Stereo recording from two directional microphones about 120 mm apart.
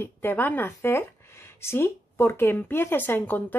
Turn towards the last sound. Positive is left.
turn(degrees=15)  # may be behind; listen again after turning